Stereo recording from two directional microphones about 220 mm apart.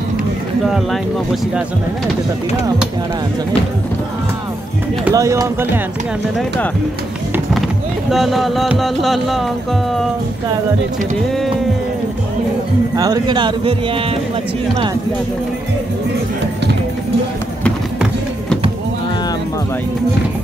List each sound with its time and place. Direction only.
5.0 s speech: 15° right (ahead or behind)
8.1 s music: centre (ahead or behind)
12.9 s speech: 15° right (ahead or behind)